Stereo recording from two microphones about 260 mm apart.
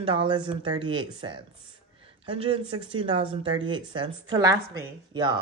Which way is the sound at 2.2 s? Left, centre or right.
Centre.